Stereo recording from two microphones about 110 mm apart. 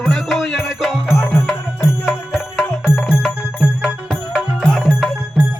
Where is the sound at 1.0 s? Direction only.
20° left (ahead or behind).